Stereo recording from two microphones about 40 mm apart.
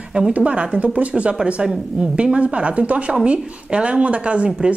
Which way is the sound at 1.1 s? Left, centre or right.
Right.